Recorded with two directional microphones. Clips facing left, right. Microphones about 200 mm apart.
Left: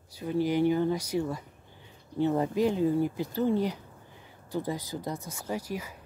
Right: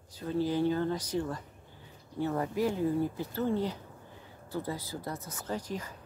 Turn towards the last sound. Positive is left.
turn(degrees=10)  # may be behind; listen again after turning